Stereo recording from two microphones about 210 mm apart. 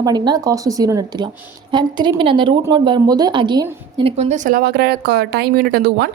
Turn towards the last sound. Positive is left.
turn(degrees=-45)  # may be behind; listen again after turning